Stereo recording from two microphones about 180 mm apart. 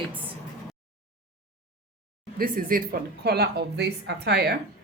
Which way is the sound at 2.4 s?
50° right (ahead or behind).